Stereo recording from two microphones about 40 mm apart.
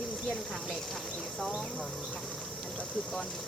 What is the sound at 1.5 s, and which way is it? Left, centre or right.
Speech, left.